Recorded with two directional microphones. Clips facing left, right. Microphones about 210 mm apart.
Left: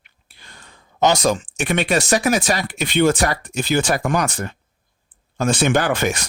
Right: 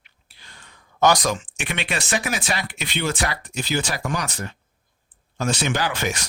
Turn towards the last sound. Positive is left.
turn(degrees=50)  # may be behind; listen again after turning